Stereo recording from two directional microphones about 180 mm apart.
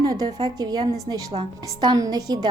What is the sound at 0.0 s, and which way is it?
A woman's voice, 20° right (ahead or behind).